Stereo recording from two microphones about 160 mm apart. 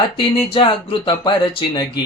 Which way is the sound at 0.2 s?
35° left (ahead or behind).